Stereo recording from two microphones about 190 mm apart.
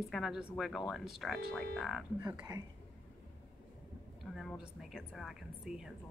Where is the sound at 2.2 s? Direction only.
15° right (ahead or behind).